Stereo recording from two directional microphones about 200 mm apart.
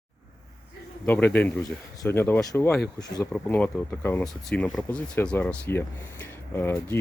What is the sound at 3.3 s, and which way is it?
Speech, 5° left (ahead or behind).